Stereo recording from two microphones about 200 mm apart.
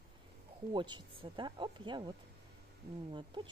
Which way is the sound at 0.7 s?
25° right (ahead or behind).